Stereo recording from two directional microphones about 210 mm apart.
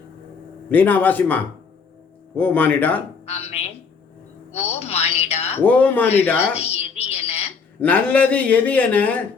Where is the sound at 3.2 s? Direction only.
30° left (ahead or behind).